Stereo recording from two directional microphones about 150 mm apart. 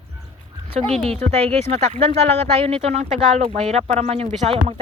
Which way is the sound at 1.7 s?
45° right (ahead or behind).